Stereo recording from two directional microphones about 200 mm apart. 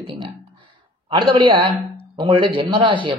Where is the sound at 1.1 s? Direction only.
25° right (ahead or behind).